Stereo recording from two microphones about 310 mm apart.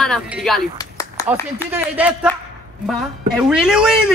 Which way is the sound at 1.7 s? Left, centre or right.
Centre.